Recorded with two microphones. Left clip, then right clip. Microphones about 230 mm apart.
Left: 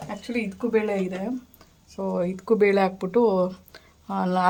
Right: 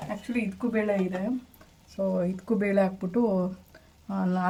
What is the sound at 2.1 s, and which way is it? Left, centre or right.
Speech, left.